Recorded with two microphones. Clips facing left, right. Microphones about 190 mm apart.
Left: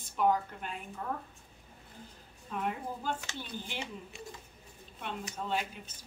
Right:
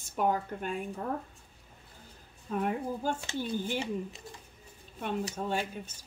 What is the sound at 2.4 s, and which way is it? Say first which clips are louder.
A woman's voice: right 5 dB; 45° right (ahead or behind).